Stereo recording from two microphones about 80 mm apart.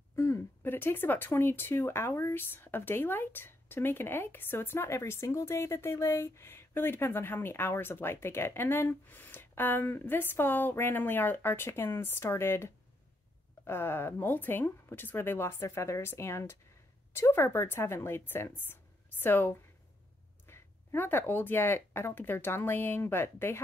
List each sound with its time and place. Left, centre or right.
0.1 s a woman's voice: left
18.7 s a sound: left
20.4 s speech: left